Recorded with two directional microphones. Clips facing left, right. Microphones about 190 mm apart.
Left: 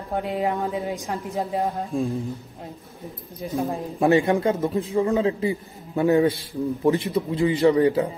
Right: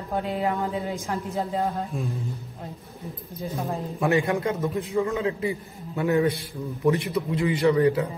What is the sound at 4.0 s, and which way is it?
A man's voice, 30° left (ahead or behind).